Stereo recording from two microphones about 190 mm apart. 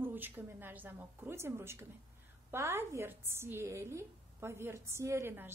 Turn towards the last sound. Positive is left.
turn(degrees=-10)  # may be behind; listen again after turning